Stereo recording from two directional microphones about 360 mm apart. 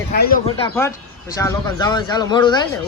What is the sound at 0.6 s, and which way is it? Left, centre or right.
Speech, centre.